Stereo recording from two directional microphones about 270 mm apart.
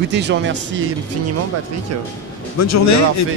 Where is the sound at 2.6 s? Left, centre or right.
Left.